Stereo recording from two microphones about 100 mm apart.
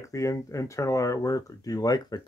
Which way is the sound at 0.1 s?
35° left (ahead or behind).